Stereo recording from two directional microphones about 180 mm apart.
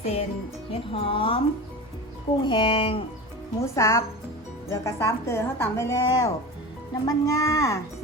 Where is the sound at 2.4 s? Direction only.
30° left (ahead or behind).